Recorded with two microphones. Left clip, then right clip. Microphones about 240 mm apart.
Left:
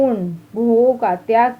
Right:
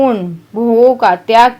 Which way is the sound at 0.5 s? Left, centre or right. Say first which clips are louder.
Right 5 dB; right.